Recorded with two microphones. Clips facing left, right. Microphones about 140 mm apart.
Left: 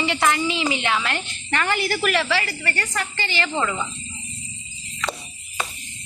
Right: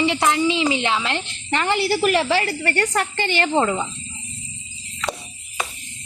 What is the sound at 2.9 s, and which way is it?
Speech, 55° right (ahead or behind).